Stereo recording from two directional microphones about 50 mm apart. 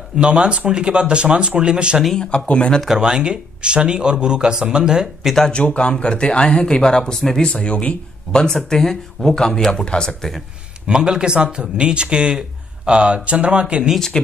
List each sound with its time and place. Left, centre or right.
0.2 s speech: centre
2.1 s speech: left
3.0 s speech: centre
5.5 s speech: left
7.5 s speech: left
8.6 s speech: centre
10.9 s speech: centre
13.9 s speech: centre